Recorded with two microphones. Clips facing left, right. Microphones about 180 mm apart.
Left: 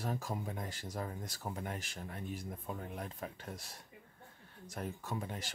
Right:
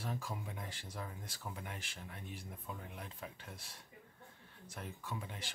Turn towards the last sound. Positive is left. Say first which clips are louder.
# left 5 dB
turn(degrees=45)  # may be behind; listen again after turning